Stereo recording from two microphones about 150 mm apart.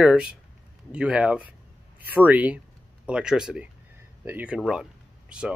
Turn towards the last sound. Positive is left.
turn(degrees=-5)  # may be behind; listen again after turning